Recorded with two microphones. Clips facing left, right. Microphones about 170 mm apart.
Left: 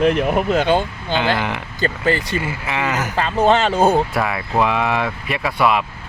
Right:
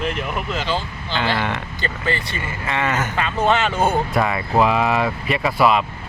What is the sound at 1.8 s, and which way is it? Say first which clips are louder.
Speech: left 8 dB; 40° left (ahead or behind).